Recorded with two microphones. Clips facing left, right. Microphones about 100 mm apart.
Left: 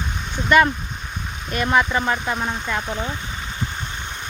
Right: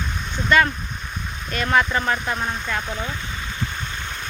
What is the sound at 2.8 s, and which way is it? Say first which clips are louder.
Speech: left 2 dB; 20° left (ahead or behind).